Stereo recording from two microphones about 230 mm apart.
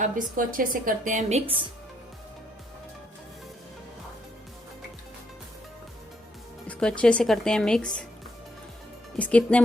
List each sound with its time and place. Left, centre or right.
0.0 s a woman's voice: right
6.7 s speech: centre
9.1 s speech: centre